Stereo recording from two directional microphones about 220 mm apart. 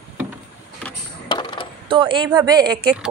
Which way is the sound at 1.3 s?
20° left (ahead or behind).